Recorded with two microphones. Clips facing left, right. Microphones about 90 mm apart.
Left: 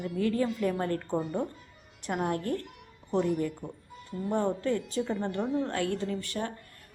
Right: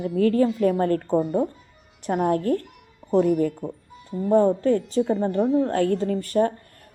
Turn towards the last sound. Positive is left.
turn(degrees=-40)  # may be behind; listen again after turning